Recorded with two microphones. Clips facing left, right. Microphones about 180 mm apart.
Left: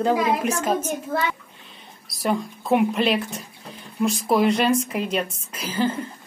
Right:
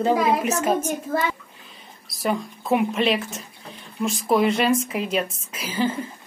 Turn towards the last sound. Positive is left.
turn(degrees=-5)  # may be behind; listen again after turning